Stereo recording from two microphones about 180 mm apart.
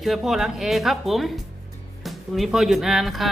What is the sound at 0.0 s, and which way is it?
Speech, centre (ahead or behind).